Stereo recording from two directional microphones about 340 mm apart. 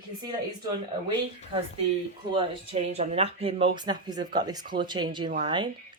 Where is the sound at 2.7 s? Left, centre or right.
Centre.